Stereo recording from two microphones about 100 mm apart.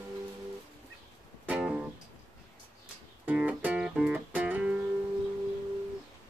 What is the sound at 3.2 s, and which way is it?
Music, 15° right (ahead or behind).